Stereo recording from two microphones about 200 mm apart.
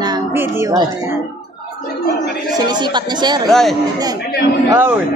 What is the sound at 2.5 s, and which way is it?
Speech, 20° right (ahead or behind).